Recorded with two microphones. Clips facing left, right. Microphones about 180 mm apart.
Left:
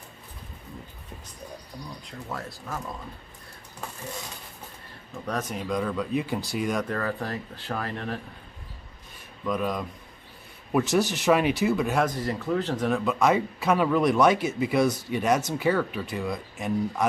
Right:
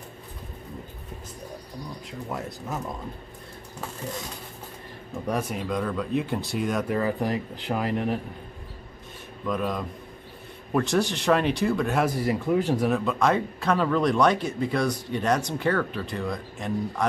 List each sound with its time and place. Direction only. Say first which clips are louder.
2.2 s speech: right 3 dB; 20° right (ahead or behind)
5.2 s speech: right 2 dB; 10° right (ahead or behind)
6.9 s speech: right 4 dB; 15° right (ahead or behind)
9.4 s speech: even; centre (ahead or behind)
12.9 s speech: even; centre (ahead or behind)